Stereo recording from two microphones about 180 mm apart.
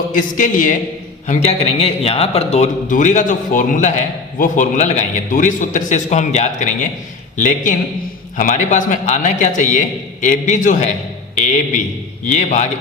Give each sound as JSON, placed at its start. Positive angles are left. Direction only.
{"t": 0.1, "sound": "speech", "side_deg": 45}
{"t": 1.3, "sound": "a man's voice", "side_deg": 35}